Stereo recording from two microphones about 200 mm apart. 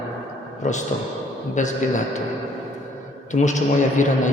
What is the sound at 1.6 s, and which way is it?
Speech, 40° left (ahead or behind).